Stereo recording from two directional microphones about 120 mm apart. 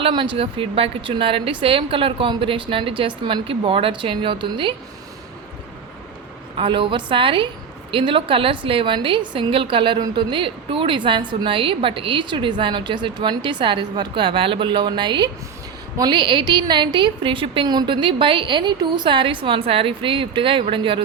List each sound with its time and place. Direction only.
0.0 s a woman's voice: 45° right (ahead or behind)
6.6 s a woman's voice: 45° right (ahead or behind)